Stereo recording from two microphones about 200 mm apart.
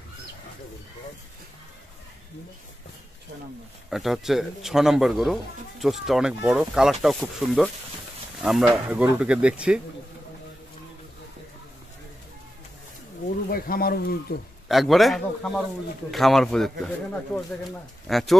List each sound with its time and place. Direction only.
3.9 s speech: centre (ahead or behind)
13.5 s speech: 45° left (ahead or behind)
14.7 s speech: centre (ahead or behind)